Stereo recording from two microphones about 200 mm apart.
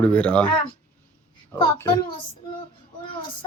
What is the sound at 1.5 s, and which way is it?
Speech, 20° left (ahead or behind).